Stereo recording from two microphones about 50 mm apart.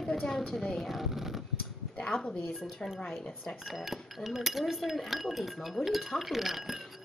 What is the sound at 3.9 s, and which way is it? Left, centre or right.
Speech, centre.